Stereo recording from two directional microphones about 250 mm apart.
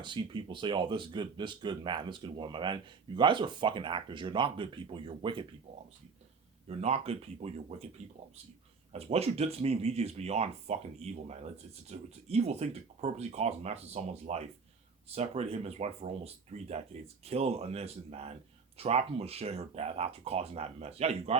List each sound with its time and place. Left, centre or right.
0.0 s speech: centre
6.7 s speech: right
8.9 s speech: right